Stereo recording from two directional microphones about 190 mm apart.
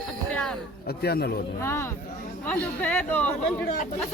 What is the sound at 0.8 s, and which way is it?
Speech, 55° left (ahead or behind).